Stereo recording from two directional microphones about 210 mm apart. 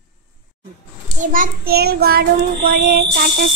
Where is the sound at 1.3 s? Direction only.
45° right (ahead or behind).